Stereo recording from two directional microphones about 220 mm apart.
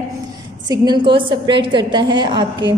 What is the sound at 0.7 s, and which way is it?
A woman's voice, 20° right (ahead or behind).